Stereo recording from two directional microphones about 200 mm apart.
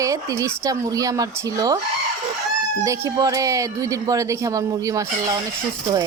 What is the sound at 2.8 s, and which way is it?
Speech, 15° right (ahead or behind).